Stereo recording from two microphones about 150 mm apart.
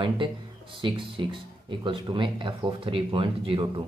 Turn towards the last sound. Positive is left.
turn(degrees=-35)  # may be behind; listen again after turning